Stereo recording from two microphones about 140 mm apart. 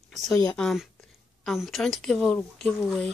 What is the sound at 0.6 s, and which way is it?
Speech, centre (ahead or behind).